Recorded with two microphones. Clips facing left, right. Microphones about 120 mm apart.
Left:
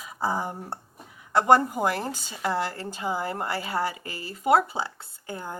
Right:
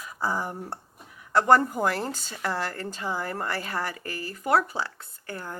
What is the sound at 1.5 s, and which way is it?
A woman's voice, 10° left (ahead or behind).